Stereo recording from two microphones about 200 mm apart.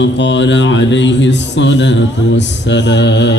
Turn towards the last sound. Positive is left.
turn(degrees=60)  # may be behind; listen again after turning